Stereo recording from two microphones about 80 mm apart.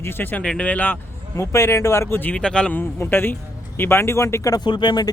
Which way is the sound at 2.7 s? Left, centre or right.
Left.